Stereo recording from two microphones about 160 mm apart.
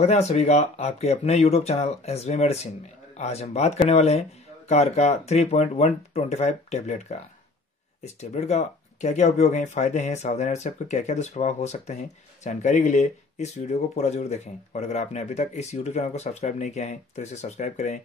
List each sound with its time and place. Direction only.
0.0 s speech: 45° left (ahead or behind)